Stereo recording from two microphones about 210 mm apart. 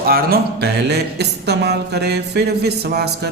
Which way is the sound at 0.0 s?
45° right (ahead or behind).